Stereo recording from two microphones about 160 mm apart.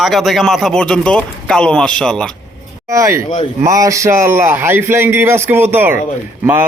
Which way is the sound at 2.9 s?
20° right (ahead or behind).